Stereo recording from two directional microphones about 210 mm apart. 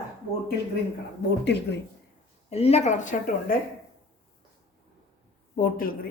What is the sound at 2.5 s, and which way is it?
A woman's voice, 30° left (ahead or behind).